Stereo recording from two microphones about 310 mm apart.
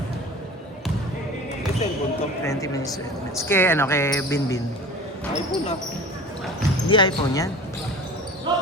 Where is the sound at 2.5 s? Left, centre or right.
Centre.